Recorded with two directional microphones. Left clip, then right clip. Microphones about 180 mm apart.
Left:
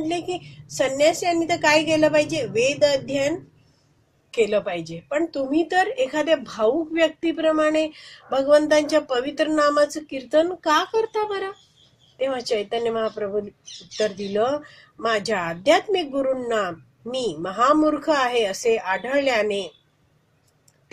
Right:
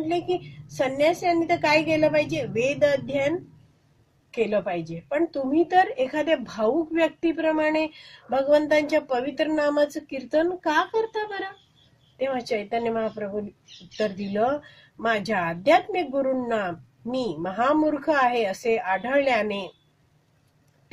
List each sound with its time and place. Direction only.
0.7 s a woman's voice: 10° left (ahead or behind)
4.6 s a woman's voice: 10° left (ahead or behind)